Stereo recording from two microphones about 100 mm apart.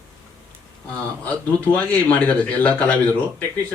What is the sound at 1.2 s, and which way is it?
A man's voice, 15° left (ahead or behind).